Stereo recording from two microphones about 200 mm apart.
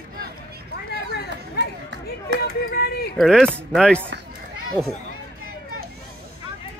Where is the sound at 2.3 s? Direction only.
50° left (ahead or behind).